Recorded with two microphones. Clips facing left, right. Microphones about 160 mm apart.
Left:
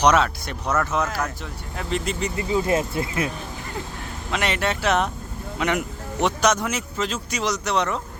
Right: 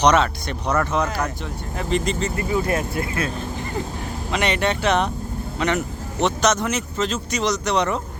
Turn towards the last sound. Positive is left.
turn(degrees=0)  # may be behind; listen again after turning